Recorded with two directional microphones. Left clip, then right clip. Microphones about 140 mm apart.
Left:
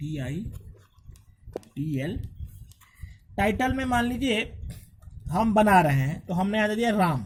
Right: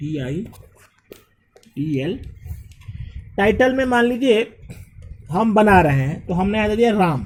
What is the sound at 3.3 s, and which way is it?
A man's voice, 60° left (ahead or behind).